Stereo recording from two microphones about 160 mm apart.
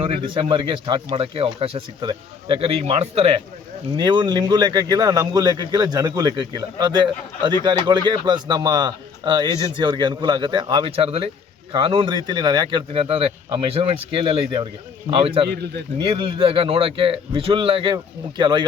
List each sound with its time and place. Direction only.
0.0 s speech: 35° right (ahead or behind)
3.9 s a man's voice: 30° right (ahead or behind)